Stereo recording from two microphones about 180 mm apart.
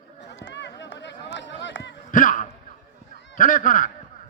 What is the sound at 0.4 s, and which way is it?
Run, 80° left.